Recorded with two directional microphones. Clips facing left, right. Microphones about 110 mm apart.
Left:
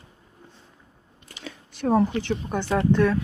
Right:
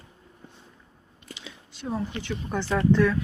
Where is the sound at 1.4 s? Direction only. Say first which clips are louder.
Left 10 dB; 50° left (ahead or behind).